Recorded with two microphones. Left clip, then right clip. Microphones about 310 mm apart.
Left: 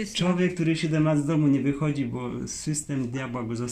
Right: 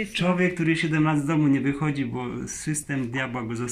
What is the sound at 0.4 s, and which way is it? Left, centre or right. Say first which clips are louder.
A man's voice: right 2 dB; centre.